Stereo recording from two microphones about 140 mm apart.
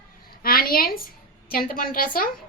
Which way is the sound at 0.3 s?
90° left.